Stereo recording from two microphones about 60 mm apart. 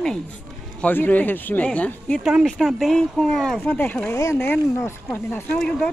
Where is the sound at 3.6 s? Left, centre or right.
Left.